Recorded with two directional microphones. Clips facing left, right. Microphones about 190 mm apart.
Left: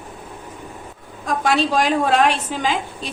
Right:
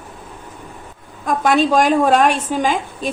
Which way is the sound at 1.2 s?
50° right (ahead or behind).